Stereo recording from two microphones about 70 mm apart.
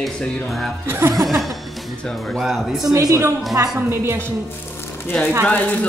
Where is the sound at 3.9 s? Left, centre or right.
Right.